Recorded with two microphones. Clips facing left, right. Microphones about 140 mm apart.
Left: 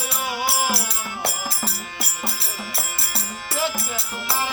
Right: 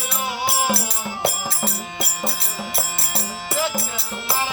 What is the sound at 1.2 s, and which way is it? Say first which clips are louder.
Music: right 4 dB; 20° right (ahead or behind).